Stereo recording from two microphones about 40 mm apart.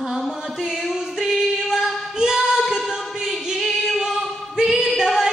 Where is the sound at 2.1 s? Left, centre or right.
Centre.